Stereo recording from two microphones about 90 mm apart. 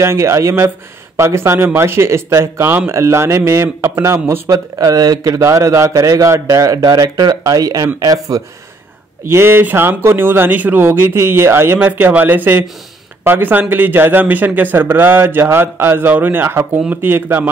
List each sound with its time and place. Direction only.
0.0 s a man's voice: 30° right (ahead or behind)
4.7 s a man's voice: 40° right (ahead or behind)
9.3 s speech: 25° right (ahead or behind)